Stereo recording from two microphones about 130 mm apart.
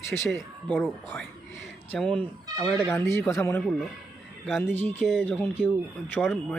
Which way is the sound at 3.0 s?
20° left (ahead or behind).